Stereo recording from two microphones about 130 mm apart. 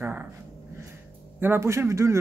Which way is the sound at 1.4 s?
20° right (ahead or behind).